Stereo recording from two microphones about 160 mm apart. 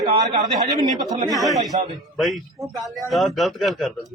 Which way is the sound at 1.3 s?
Centre (ahead or behind).